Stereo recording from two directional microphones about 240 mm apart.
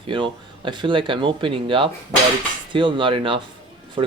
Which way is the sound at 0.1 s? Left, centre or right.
Right.